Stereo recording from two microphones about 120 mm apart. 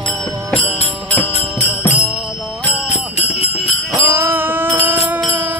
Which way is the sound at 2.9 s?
70° left (ahead or behind).